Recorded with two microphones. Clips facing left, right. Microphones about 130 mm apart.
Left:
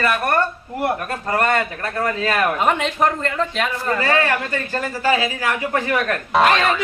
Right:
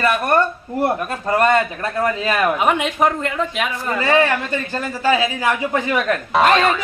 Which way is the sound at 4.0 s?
20° right (ahead or behind).